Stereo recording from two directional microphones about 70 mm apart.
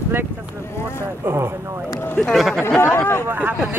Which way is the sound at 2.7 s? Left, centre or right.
Left.